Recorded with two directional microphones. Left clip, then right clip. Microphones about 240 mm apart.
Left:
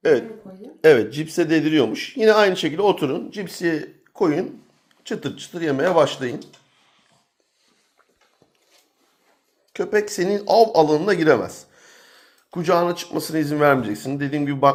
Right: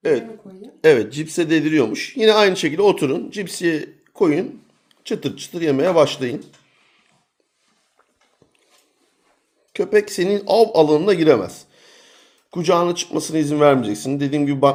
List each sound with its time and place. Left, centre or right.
0.0 s speech: centre; by 6.3 s right
9.8 s speech: right